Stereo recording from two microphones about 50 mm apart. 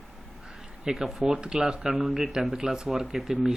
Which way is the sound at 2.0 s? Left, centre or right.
Centre.